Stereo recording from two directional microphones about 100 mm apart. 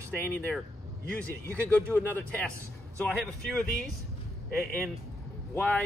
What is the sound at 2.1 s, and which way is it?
Speech, 15° left (ahead or behind).